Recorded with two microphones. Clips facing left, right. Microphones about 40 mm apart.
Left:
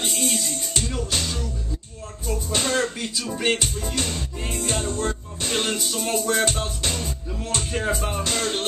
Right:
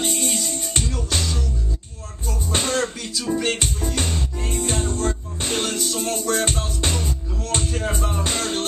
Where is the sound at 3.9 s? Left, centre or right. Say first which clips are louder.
Right 1 dB; right.